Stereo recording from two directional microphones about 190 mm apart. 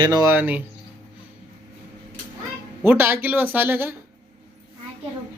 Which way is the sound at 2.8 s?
10° right (ahead or behind).